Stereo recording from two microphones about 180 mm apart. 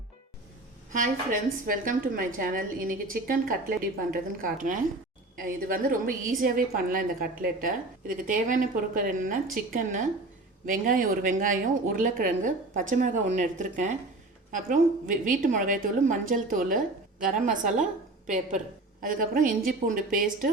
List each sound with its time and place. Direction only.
0.9 s a woman's voice: 50° right (ahead or behind)
10.7 s a woman's voice: 50° right (ahead or behind)